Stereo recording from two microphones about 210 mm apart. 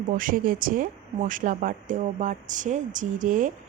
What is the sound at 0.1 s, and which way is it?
Speech, 40° right (ahead or behind).